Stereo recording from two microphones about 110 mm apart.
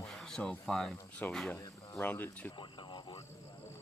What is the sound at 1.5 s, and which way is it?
Cricket, 30° left (ahead or behind).